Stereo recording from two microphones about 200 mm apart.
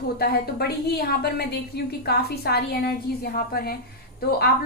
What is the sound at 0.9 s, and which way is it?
A woman's voice, 50° left (ahead or behind).